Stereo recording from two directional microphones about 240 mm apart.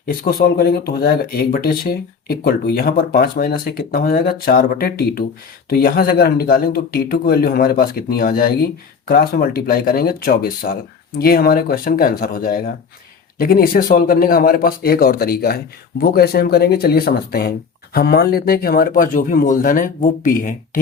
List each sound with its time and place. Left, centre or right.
0.0 s speech: left